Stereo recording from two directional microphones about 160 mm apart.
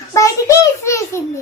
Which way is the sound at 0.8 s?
15° left (ahead or behind).